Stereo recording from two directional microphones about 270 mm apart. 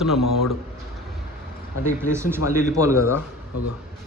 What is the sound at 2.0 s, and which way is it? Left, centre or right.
Speech, centre.